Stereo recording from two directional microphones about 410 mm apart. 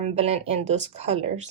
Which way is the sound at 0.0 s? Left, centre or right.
Centre.